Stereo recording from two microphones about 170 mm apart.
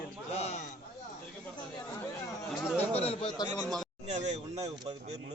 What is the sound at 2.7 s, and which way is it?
Speech, 10° left (ahead or behind).